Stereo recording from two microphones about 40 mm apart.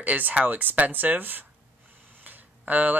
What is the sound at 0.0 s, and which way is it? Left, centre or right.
Speech, right.